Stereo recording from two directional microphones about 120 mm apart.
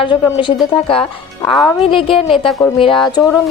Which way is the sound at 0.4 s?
40° left (ahead or behind).